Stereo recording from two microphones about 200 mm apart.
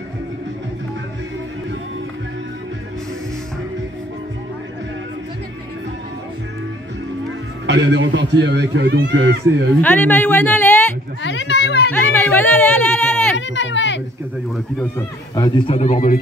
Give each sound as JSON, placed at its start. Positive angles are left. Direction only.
{"t": 7.6, "sound": "a man's voice", "side_deg": -60}
{"t": 9.8, "sound": "speech", "side_deg": 10}
{"t": 11.2, "sound": "a child's voice", "side_deg": 60}
{"t": 11.9, "sound": "speech", "side_deg": 10}
{"t": 13.6, "sound": "a child's voice", "side_deg": 65}
{"t": 14.8, "sound": "speech", "side_deg": 15}